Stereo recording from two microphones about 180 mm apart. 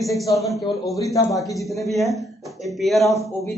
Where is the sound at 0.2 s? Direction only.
15° left (ahead or behind).